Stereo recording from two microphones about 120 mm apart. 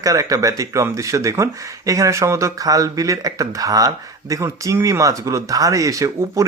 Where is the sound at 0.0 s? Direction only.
25° right (ahead or behind).